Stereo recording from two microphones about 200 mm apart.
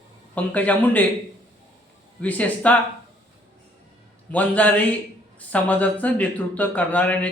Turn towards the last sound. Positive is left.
turn(degrees=5)  # may be behind; listen again after turning